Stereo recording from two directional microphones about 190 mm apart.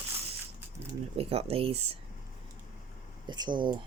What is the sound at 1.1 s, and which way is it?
Speech, 30° right (ahead or behind).